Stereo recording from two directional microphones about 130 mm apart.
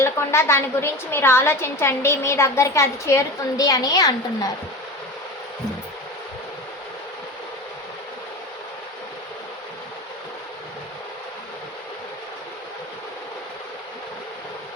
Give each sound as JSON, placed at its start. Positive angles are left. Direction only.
{"t": 0.0, "sound": "a woman's voice", "side_deg": 20}